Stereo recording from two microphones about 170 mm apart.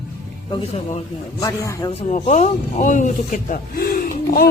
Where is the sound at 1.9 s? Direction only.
40° left (ahead or behind).